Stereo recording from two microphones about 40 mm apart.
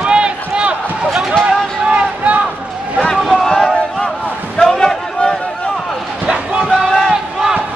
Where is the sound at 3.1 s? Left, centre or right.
Centre.